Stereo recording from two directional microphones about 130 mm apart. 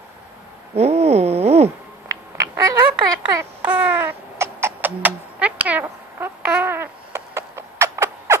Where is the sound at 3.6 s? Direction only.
10° right (ahead or behind).